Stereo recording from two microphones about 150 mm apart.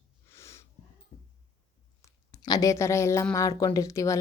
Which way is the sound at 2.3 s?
25° left (ahead or behind).